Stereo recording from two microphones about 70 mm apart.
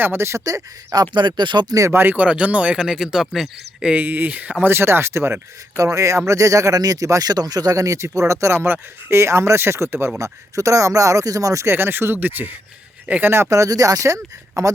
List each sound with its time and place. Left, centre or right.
0.0 s speech: right
1.1 s speech: right
1.9 s speech: right
2.1 s speech: centre
3.8 s speech: right
4.6 s speech: right
11.7 s speech: right
13.5 s speech: right